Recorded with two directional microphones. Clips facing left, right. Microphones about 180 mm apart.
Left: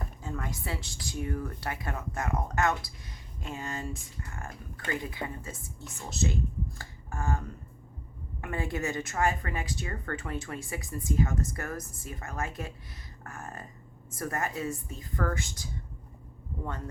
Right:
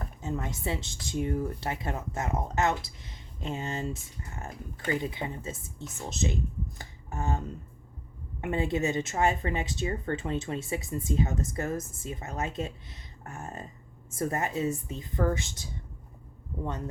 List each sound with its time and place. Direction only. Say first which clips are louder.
0.2 s speech: right 5 dB; 20° right (ahead or behind)